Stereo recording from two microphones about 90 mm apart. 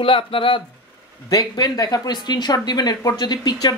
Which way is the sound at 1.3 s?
50° left (ahead or behind).